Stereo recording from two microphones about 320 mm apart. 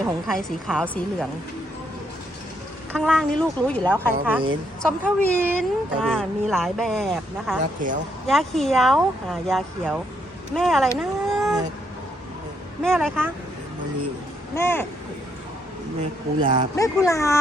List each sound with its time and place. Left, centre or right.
0.0 s speech: centre
2.9 s speech: centre
3.9 s speech: centre
4.8 s speech: centre
7.8 s speech: right
8.3 s speech: centre
12.8 s speech: centre
14.5 s speech: centre
16.4 s speech: right
16.7 s speech: centre